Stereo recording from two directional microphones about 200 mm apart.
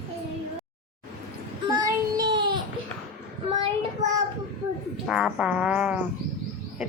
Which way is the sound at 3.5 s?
20° right (ahead or behind).